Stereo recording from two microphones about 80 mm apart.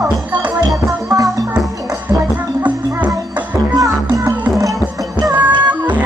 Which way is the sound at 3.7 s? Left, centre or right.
Right.